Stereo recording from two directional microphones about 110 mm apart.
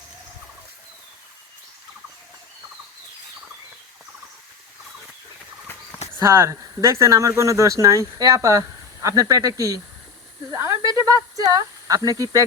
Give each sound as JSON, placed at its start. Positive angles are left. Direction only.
{"t": 6.1, "sound": "speech", "side_deg": -25}
{"t": 10.5, "sound": "snake", "side_deg": -30}
{"t": 11.3, "sound": "speech", "side_deg": -35}